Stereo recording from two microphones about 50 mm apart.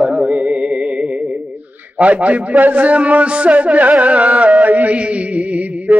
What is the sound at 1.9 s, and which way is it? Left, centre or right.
A man's voice, right.